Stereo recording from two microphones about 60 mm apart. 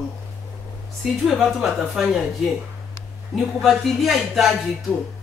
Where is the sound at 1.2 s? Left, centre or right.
Centre.